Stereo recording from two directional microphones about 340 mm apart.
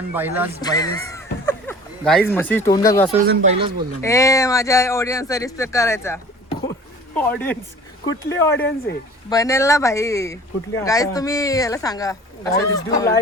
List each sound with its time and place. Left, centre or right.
0.1 s speech: centre
0.6 s speech: centre
3.1 s speech: centre
4.0 s speech: centre
7.2 s speech: centre